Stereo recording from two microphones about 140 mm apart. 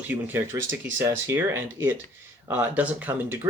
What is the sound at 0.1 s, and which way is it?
Speech, 15° right (ahead or behind).